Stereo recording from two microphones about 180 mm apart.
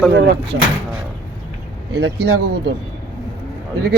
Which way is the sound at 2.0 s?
65° right (ahead or behind).